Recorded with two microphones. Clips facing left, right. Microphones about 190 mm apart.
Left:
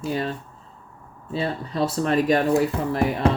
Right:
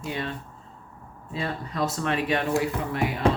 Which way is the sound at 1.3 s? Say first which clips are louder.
Left 4 dB; 30° left (ahead or behind).